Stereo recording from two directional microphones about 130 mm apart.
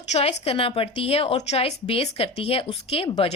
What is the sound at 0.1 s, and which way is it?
A woman's voice, 50° left (ahead or behind).